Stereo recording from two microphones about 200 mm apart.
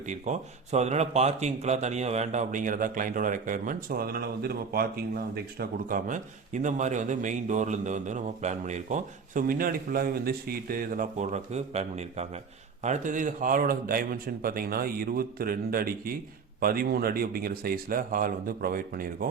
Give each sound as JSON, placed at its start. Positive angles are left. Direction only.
{"t": 0.1, "sound": "a man's voice", "side_deg": -35}